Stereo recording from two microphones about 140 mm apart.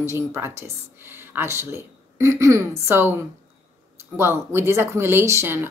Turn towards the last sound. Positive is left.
turn(degrees=-20)  # may be behind; listen again after turning